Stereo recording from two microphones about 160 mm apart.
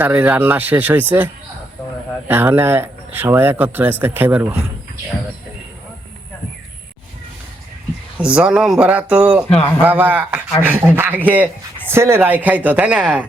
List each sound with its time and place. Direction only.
0.0 s speech: 10° right (ahead or behind)
8.2 s speech: 5° right (ahead or behind)